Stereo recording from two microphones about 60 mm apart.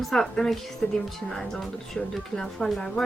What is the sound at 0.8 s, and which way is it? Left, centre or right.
Speech, left.